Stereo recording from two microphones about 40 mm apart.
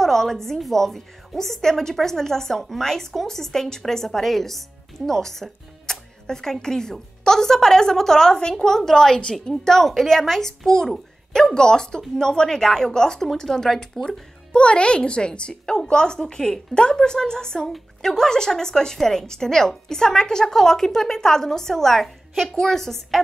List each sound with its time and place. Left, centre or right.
0.0 s speech: centre
14.5 s a woman's voice: left; by 23.2 s centre